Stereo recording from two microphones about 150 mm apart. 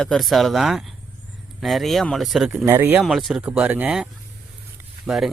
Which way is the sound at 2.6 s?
15° right (ahead or behind).